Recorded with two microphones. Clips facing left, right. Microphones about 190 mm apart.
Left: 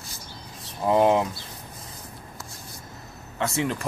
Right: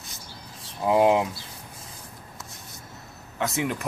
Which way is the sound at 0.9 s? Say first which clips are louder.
Even; 10° right (ahead or behind).